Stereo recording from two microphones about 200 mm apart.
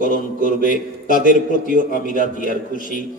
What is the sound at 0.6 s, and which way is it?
Speech, 40° left (ahead or behind).